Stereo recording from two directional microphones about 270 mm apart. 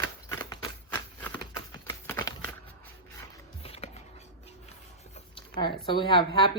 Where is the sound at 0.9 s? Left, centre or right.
Centre.